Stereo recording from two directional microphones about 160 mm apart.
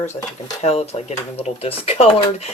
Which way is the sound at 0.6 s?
40° left (ahead or behind).